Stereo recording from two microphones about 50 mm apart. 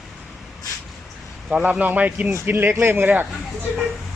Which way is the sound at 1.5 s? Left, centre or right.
Right.